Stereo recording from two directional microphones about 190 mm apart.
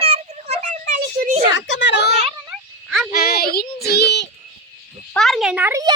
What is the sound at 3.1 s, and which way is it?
Child singing, 55° left (ahead or behind).